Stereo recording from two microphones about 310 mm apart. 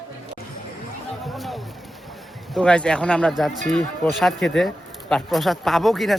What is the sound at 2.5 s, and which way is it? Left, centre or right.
Speech, centre.